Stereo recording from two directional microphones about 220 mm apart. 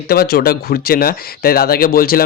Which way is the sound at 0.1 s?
45° left (ahead or behind).